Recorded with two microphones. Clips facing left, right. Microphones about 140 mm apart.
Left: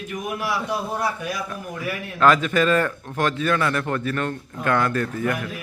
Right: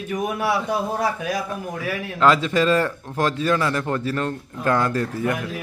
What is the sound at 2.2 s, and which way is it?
A man's voice, 25° right (ahead or behind).